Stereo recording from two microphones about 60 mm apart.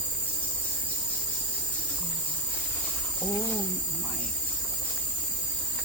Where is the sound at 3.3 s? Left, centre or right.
Left.